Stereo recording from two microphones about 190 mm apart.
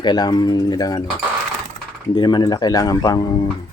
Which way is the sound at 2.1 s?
25° left (ahead or behind).